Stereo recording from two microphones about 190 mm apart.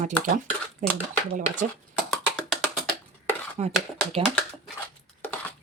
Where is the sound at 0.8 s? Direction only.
45° right (ahead or behind).